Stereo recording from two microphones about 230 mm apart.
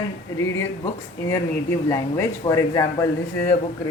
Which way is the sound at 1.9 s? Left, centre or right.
Centre.